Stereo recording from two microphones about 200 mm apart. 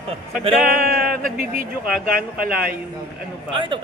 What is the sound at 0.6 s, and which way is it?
Speech, 45° right (ahead or behind).